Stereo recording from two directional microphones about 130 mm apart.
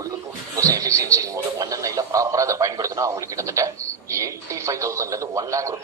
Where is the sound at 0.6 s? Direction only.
25° right (ahead or behind).